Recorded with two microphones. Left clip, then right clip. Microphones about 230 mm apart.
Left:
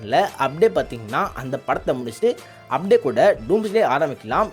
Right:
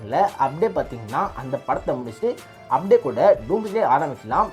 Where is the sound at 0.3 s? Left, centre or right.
Left.